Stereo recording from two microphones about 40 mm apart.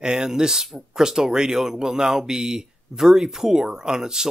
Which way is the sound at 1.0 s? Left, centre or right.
Centre.